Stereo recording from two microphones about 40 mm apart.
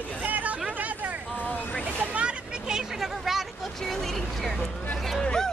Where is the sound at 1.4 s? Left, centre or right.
Left.